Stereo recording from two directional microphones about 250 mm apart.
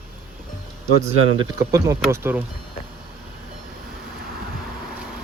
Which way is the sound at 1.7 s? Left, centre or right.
Centre.